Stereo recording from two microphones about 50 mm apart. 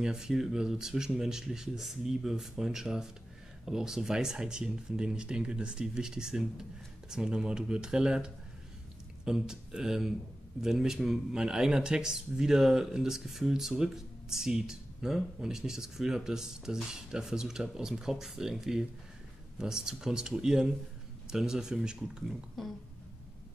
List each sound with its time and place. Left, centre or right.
0.0 s speech: centre
22.6 s speech: centre